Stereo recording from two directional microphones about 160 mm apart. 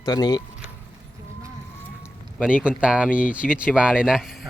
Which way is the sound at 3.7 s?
5° right (ahead or behind).